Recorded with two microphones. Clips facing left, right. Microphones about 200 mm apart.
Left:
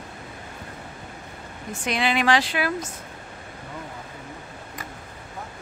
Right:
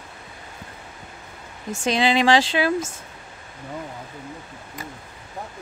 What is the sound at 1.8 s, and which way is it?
Speech, 25° right (ahead or behind).